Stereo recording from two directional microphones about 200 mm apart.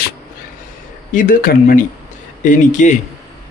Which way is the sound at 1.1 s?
45° left (ahead or behind).